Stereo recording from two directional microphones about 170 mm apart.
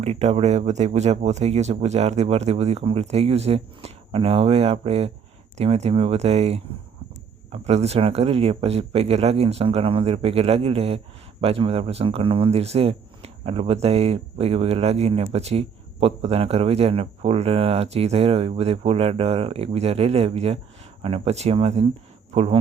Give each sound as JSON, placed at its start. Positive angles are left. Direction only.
{"t": 0.0, "sound": "speech", "side_deg": -40}